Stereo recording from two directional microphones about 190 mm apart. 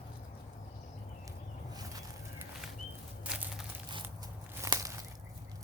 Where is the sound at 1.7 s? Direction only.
20° right (ahead or behind).